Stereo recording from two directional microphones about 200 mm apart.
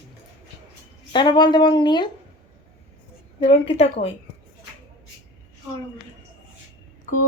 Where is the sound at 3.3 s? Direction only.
25° left (ahead or behind).